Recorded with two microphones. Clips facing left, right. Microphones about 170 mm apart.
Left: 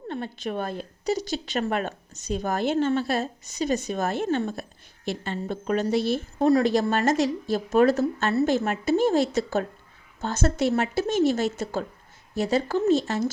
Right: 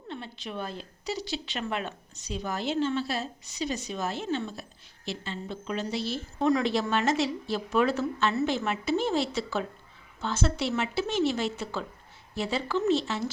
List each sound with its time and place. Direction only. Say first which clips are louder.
0.1 s a woman's voice: left 7 dB; 50° left (ahead or behind)
6.4 s a woman's voice: left 5 dB; 40° left (ahead or behind)